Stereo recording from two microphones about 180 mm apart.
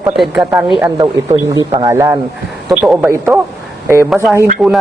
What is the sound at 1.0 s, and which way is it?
A man's voice, 20° right (ahead or behind).